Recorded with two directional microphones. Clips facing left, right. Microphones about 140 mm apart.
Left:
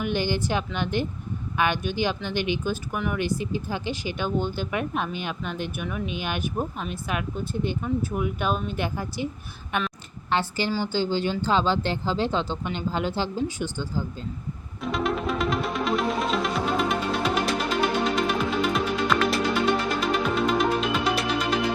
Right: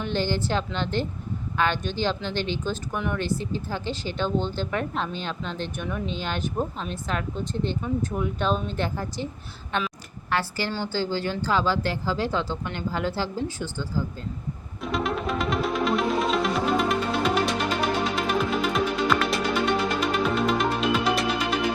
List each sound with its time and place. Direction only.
0.0 s speech: 15° left (ahead or behind)
10.2 s speech: 20° left (ahead or behind)
14.8 s music: centre (ahead or behind)